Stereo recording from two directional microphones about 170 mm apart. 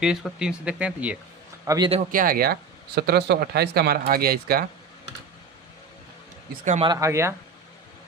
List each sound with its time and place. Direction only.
0.0 s speech: 5° right (ahead or behind)
1.6 s a man's voice: 20° right (ahead or behind)
2.1 s speech: 55° right (ahead or behind)
6.8 s speech: 20° right (ahead or behind)